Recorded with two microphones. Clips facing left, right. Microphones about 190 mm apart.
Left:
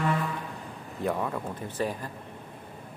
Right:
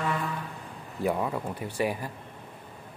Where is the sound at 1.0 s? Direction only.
10° right (ahead or behind).